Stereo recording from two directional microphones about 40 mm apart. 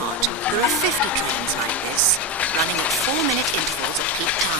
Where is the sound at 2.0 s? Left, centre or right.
Left.